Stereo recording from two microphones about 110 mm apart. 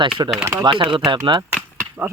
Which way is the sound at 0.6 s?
45° right (ahead or behind).